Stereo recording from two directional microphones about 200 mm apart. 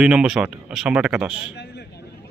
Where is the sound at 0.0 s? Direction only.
5° right (ahead or behind).